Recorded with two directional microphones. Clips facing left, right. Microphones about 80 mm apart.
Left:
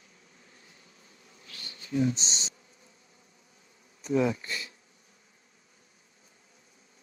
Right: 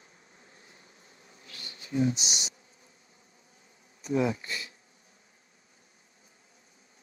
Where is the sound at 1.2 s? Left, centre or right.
Right.